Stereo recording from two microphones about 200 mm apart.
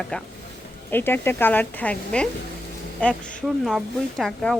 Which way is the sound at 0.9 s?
10° left (ahead or behind).